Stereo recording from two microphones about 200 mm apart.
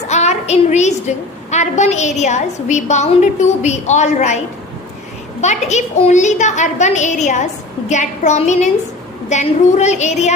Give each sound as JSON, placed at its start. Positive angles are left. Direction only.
{"t": 0.1, "sound": "a woman's voice", "side_deg": 35}
{"t": 5.4, "sound": "a woman's voice", "side_deg": 35}